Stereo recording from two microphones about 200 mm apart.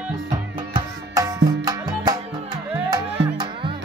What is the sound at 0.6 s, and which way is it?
Music, 20° right (ahead or behind).